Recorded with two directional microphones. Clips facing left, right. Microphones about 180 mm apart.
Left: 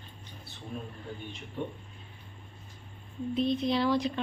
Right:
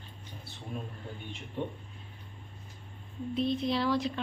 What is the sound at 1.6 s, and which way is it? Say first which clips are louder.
Speech: right 1 dB; 25° right (ahead or behind).